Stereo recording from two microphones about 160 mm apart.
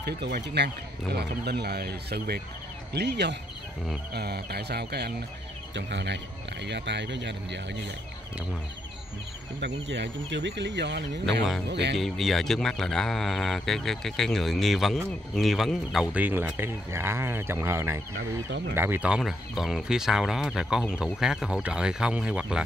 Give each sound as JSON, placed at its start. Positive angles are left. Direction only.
{"t": 0.0, "sound": "speech", "side_deg": -90}
{"t": 9.6, "sound": "speech", "side_deg": -90}
{"t": 12.0, "sound": "speech", "side_deg": 0}